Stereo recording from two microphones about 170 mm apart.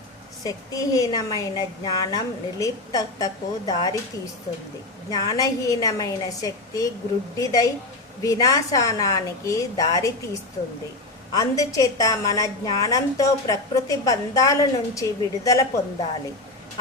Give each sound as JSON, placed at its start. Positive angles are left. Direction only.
{"t": 0.4, "sound": "a woman's voice", "side_deg": 20}
{"t": 5.1, "sound": "a woman's voice", "side_deg": 20}
{"t": 11.3, "sound": "a woman's voice", "side_deg": 20}